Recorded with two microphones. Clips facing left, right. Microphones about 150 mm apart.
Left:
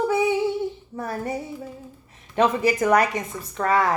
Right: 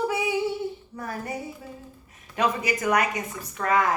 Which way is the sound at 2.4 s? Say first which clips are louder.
Left 5 dB; 30° left (ahead or behind).